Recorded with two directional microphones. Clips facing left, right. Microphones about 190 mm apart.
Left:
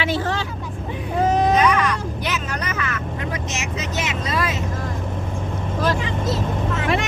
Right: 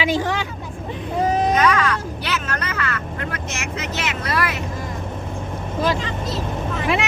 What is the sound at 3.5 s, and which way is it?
Speech, 20° left (ahead or behind).